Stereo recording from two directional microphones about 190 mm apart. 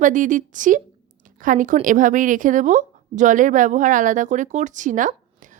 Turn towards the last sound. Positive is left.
turn(degrees=-40)  # may be behind; listen again after turning